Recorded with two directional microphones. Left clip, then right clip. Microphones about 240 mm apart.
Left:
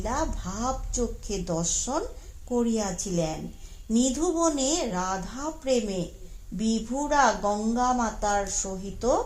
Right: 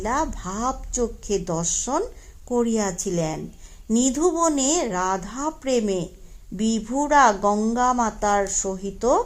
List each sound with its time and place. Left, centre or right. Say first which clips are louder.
0.0 s speech: right 5 dB; right